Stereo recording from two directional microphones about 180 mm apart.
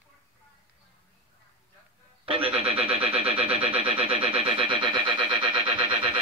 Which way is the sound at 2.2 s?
30° right (ahead or behind).